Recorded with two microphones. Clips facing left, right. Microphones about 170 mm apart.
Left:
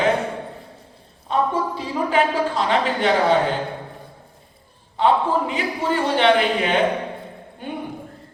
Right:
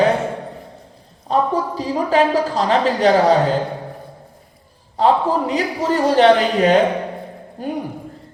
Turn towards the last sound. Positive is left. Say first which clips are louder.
# right 6 dB
turn(degrees=-40)  # may be behind; listen again after turning